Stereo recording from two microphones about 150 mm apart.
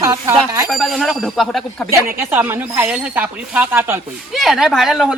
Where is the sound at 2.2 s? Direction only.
15° right (ahead or behind).